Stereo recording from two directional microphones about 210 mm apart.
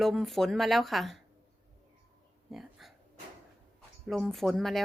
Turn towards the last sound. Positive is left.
turn(degrees=0)  # may be behind; listen again after turning